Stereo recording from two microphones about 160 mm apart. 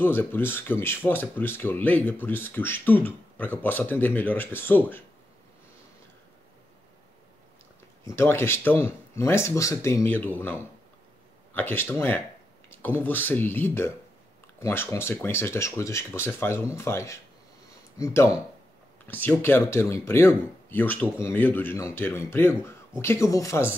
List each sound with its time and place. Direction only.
0.0 s speech: 15° left (ahead or behind)
8.2 s speech: 15° left (ahead or behind)
11.5 s speech: 15° left (ahead or behind)